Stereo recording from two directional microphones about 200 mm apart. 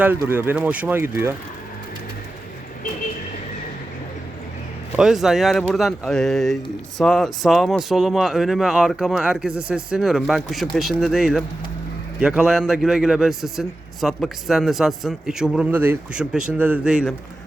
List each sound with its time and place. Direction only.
0.0 s speech: 10° right (ahead or behind)
4.9 s a man's voice: centre (ahead or behind)